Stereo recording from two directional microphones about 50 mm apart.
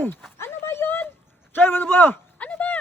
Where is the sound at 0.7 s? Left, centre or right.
Left.